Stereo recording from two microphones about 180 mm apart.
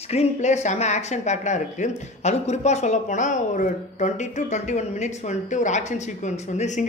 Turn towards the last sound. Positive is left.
turn(degrees=40)  # may be behind; listen again after turning